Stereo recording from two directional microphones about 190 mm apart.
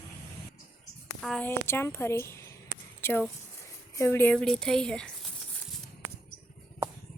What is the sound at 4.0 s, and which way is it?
A woman's voice, 10° left (ahead or behind).